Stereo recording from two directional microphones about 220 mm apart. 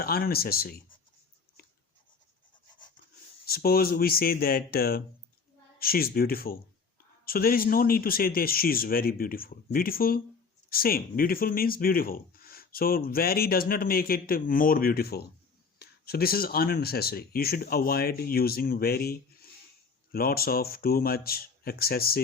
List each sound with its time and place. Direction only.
0.0 s speech: 45° left (ahead or behind)
3.4 s speech: 45° left (ahead or behind)